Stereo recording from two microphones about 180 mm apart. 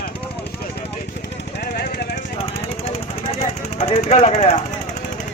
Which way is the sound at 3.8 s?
40° left (ahead or behind).